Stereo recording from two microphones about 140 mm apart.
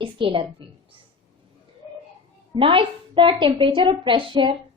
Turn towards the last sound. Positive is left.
turn(degrees=-35)  # may be behind; listen again after turning